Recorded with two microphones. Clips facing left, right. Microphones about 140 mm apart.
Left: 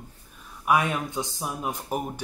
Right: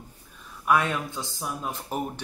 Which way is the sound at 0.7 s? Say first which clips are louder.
Even; 15° left (ahead or behind).